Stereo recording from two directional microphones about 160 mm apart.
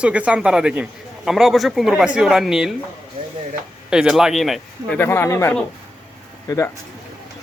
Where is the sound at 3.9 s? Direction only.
5° right (ahead or behind).